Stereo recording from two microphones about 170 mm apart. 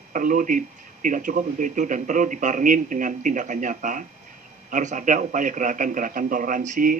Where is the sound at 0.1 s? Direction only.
50° right (ahead or behind).